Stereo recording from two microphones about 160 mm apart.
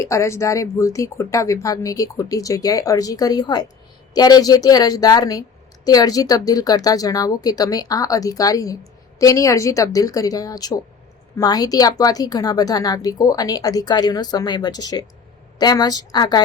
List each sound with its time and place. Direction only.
0.0 s a woman's voice: 20° left (ahead or behind)